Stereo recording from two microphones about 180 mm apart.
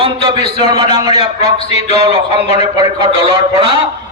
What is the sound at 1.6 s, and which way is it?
Speech, 35° left (ahead or behind).